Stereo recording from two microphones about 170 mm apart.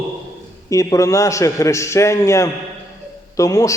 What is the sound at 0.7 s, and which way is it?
A man's voice, 20° left (ahead or behind).